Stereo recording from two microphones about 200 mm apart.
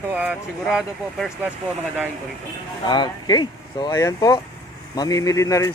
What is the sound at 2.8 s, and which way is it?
Speech, 25° left (ahead or behind).